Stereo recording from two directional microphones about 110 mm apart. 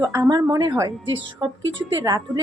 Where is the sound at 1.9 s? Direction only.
35° right (ahead or behind).